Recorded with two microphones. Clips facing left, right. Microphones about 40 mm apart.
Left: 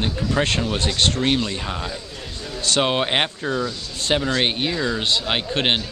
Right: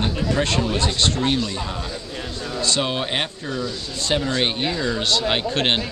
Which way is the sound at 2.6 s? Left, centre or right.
Left.